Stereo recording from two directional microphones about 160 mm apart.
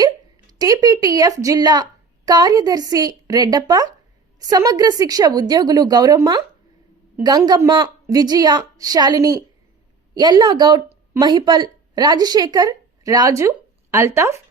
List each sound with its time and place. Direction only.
0.6 s a woman's voice: 20° right (ahead or behind)